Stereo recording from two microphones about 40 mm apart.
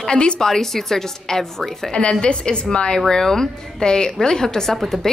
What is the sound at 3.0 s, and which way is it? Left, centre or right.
A woman's voice, centre.